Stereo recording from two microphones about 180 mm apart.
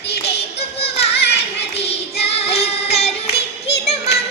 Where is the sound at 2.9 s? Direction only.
35° left (ahead or behind).